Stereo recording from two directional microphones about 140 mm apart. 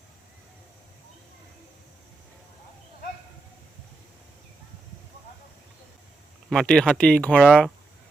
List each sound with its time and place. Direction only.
6.5 s speech: 5° left (ahead or behind)